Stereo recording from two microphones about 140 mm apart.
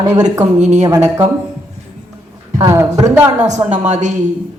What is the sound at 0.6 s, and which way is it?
Speech, 55° right (ahead or behind).